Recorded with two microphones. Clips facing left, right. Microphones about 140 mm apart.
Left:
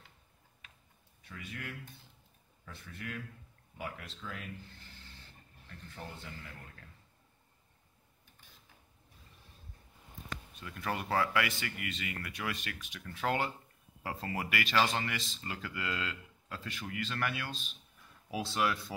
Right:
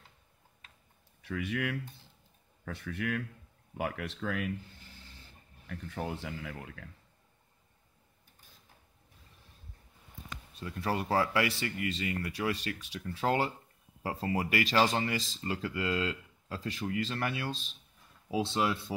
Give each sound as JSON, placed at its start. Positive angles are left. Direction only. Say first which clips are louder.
{"t": 1.2, "sound": "speech", "louder": "right 11 dB", "side_deg": -75}
{"t": 5.7, "sound": "speech", "louder": "right 10 dB", "side_deg": -85}
{"t": 10.5, "sound": "speech", "louder": "right 5 dB", "side_deg": -30}